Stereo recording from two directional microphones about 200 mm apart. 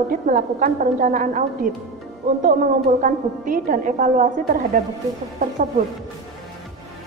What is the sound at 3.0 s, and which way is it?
A woman's voice, 40° right (ahead or behind).